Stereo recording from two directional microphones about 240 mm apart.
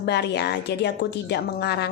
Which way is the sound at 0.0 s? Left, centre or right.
Left.